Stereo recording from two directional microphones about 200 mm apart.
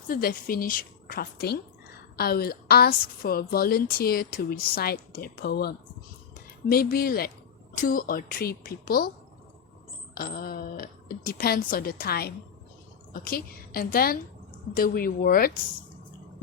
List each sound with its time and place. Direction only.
0.1 s a woman's voice: 45° left (ahead or behind)
10.2 s a woman's voice: 50° left (ahead or behind)